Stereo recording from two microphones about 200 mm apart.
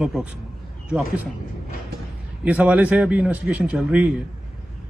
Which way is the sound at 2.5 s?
10° right (ahead or behind).